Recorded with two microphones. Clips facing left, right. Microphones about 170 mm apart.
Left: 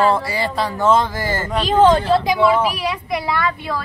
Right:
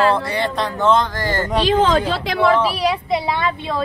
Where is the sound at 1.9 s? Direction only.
90° right.